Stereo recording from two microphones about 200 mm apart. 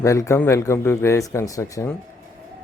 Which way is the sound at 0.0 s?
15° left (ahead or behind).